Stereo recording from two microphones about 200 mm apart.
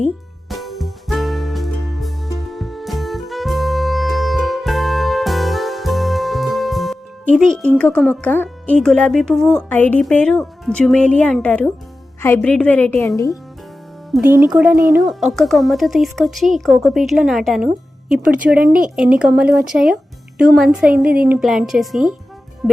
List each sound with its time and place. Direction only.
0.4 s music: centre (ahead or behind)
12.2 s a woman's voice: 10° left (ahead or behind)
14.1 s speech: 10° right (ahead or behind)